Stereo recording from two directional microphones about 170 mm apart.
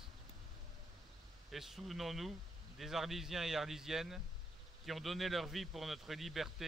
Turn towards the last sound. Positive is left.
turn(degrees=0)  # may be behind; listen again after turning